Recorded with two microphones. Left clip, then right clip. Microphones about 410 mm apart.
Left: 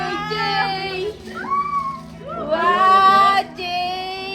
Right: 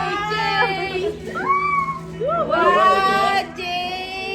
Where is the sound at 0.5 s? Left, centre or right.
Left.